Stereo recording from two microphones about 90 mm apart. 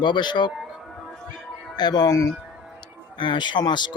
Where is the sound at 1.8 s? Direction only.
55° left (ahead or behind).